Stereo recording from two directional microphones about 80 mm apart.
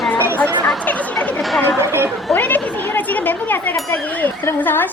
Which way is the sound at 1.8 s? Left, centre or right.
Right.